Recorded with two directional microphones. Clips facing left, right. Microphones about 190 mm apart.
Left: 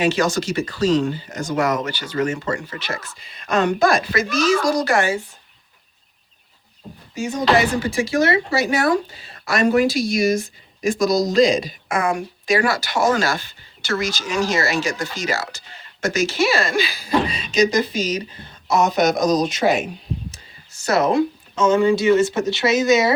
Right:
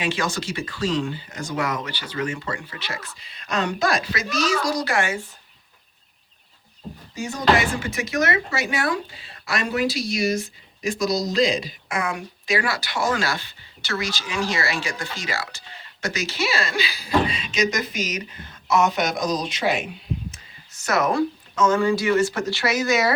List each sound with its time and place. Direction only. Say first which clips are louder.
0.0 s speech: left 7 dB; 40° left (ahead or behind)
7.2 s speech: left 6 dB; 20° left (ahead or behind)
7.5 s speech: left 5 dB; 35° left (ahead or behind)
20.8 s speech: left 4 dB; 30° left (ahead or behind)